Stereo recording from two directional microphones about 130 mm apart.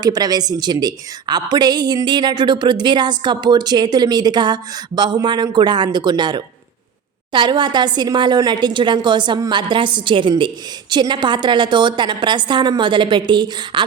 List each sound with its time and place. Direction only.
0.0 s a woman's voice: 30° right (ahead or behind)